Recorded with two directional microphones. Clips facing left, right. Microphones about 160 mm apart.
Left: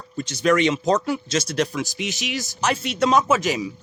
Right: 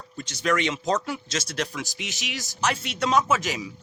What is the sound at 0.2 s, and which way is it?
Speech, 20° left (ahead or behind).